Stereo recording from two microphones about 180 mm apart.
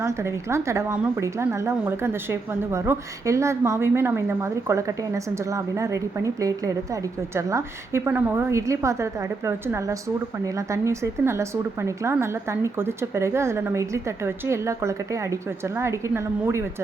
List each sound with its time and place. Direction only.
0.0 s a woman's voice: 15° right (ahead or behind)